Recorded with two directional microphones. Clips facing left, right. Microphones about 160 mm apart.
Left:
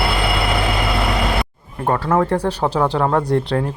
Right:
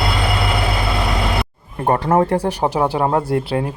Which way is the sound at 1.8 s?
25° right (ahead or behind).